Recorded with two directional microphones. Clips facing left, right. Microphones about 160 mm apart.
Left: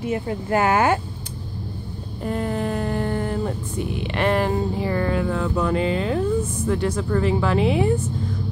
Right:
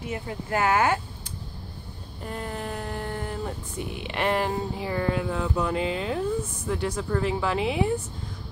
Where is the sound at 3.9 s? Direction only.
10° right (ahead or behind).